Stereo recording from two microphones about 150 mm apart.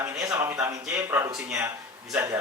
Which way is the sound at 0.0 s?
20° right (ahead or behind).